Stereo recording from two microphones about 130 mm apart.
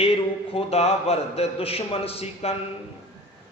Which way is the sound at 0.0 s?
45° left (ahead or behind).